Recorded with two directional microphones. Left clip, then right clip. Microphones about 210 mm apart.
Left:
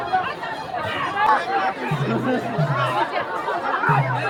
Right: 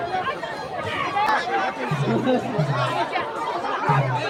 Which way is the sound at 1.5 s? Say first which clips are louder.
Left 2 dB; 5° left (ahead or behind).